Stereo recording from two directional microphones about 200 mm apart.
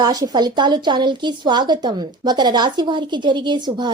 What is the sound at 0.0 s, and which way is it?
A woman's voice, 20° right (ahead or behind).